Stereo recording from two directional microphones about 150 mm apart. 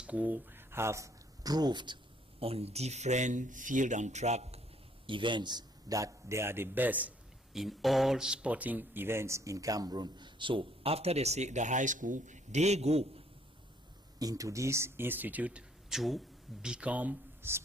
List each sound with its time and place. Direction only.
0.0 s speech: 10° right (ahead or behind); by 2.0 s 30° right (ahead or behind)
2.4 s speech: 40° right (ahead or behind)
5.0 s a man's voice: 35° right (ahead or behind); by 7.1 s 10° right (ahead or behind)
7.5 s speech: centre (ahead or behind); by 13.2 s 45° right (ahead or behind)
14.2 s speech: 25° right (ahead or behind)